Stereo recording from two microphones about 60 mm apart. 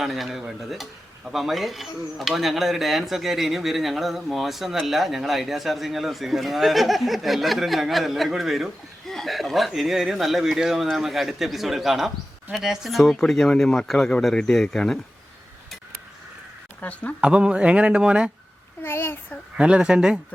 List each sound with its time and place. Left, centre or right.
0.0 s speech: centre
16.8 s speech: left
17.2 s speech: centre
18.8 s a child's voice: left
19.5 s speech: centre